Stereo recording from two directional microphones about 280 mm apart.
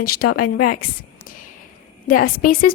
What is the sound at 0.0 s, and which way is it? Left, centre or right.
Speech, left.